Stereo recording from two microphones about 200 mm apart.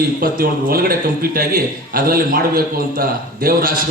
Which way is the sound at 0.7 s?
45° right (ahead or behind).